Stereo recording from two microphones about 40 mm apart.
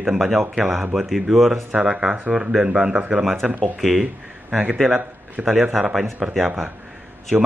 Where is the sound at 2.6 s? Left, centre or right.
Right.